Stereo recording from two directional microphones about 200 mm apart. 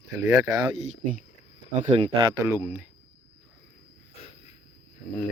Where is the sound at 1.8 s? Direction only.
35° right (ahead or behind).